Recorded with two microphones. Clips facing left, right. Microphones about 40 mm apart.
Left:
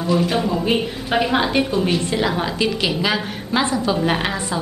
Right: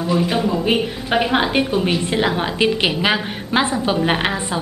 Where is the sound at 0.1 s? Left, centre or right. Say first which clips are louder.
Even; centre.